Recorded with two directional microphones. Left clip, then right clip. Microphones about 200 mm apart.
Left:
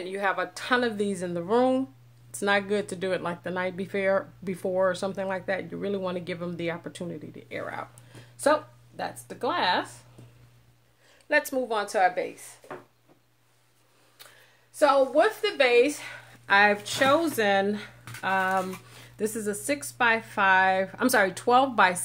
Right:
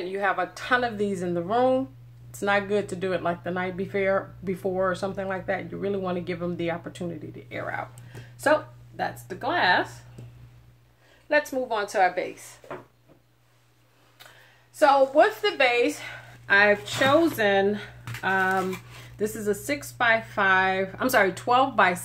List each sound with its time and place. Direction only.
0.1 s speech: 45° left (ahead or behind)
11.2 s speech: 50° left (ahead or behind)
14.8 s speech: 40° left (ahead or behind)